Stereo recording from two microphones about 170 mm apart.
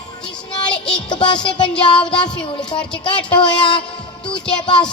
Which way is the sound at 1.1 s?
25° left (ahead or behind).